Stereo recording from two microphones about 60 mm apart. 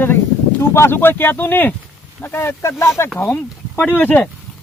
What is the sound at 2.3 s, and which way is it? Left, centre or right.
Speech, left.